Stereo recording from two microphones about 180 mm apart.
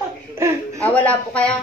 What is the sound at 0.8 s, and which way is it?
Speech, 10° left (ahead or behind).